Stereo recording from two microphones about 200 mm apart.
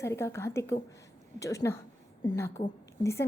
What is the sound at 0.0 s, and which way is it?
A woman's voice, 15° left (ahead or behind).